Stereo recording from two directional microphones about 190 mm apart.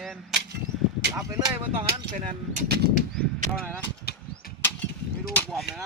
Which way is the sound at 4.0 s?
55° left (ahead or behind).